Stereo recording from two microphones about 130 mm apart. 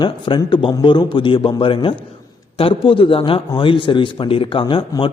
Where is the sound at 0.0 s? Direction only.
35° left (ahead or behind).